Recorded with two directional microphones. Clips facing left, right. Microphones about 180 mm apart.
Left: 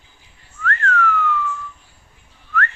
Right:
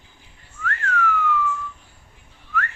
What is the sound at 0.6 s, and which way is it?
Whistling, 10° right (ahead or behind).